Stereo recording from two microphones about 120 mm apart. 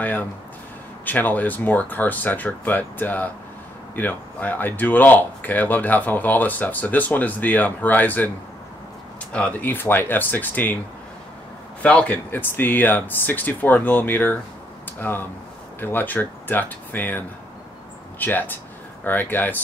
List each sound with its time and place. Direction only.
0.0 s speech: 15° left (ahead or behind)
9.3 s speech: 10° left (ahead or behind)
11.8 s speech: 10° left (ahead or behind)
18.2 s speech: 15° left (ahead or behind)